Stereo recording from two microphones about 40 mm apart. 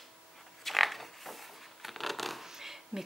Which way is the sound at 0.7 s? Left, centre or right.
Centre.